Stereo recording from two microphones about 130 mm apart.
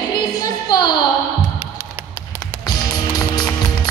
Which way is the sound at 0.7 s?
30° left (ahead or behind).